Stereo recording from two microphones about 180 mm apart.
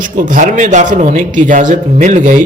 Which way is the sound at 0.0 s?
50° right (ahead or behind).